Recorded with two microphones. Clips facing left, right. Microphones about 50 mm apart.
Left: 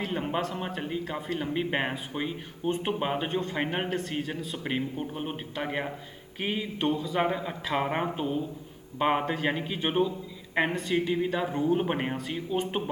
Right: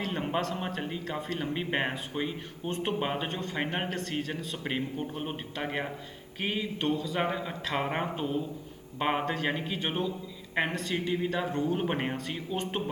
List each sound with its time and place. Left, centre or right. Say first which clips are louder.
0.0 s a sound: left 1 dB; centre
0.8 s a man's voice: left 2 dB; centre
2.6 s a man's voice: left 3 dB; centre
3.0 s a man's voice: left 3 dB; centre
7.2 s a man's voice: left 3 dB; centre
10.5 s a man's voice: left 3 dB; centre